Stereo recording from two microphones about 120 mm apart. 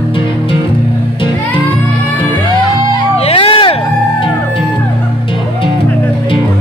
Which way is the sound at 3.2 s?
50° left (ahead or behind).